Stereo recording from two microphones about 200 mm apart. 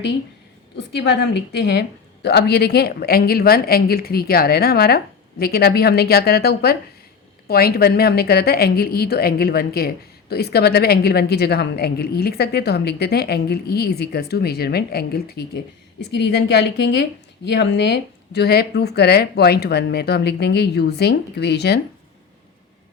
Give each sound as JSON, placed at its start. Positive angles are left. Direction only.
{"t": 0.8, "sound": "a woman's voice", "side_deg": 60}